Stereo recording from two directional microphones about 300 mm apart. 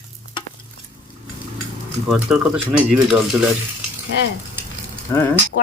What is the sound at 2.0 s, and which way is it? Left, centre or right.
Speech, centre.